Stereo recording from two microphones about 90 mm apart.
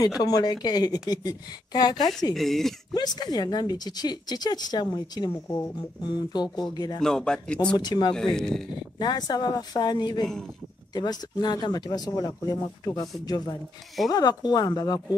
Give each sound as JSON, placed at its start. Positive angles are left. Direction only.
{"t": 0.2, "sound": "speech", "side_deg": 45}
{"t": 2.3, "sound": "speech", "side_deg": 5}
{"t": 2.9, "sound": "speech", "side_deg": 50}
{"t": 7.0, "sound": "speech", "side_deg": 5}
{"t": 7.7, "sound": "speech", "side_deg": 55}
{"t": 8.4, "sound": "speech", "side_deg": 5}
{"t": 9.0, "sound": "speech", "side_deg": 50}
{"t": 14.1, "sound": "speech", "side_deg": 50}